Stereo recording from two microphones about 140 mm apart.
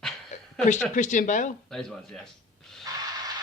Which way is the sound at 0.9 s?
65° left (ahead or behind).